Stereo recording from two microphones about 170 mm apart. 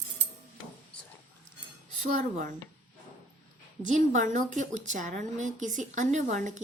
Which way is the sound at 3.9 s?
45° right (ahead or behind).